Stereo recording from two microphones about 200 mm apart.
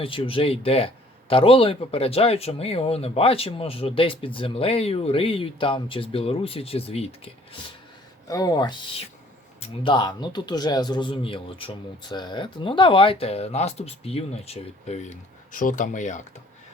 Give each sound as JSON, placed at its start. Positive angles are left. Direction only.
{"t": 0.0, "sound": "speech", "side_deg": 25}
{"t": 8.3, "sound": "speech", "side_deg": 20}